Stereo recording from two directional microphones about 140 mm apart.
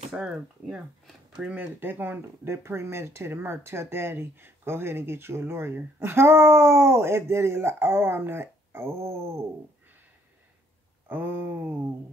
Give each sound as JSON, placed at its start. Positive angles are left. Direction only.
{"t": 0.1, "sound": "speech", "side_deg": -5}
{"t": 11.1, "sound": "speech", "side_deg": -15}